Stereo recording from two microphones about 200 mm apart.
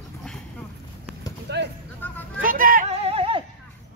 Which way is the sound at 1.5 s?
55° right (ahead or behind).